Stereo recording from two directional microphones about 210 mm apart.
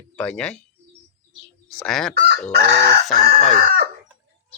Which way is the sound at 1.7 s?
5° left (ahead or behind).